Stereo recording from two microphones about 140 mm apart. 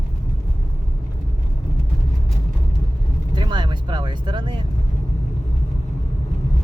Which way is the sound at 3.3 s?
35° right (ahead or behind).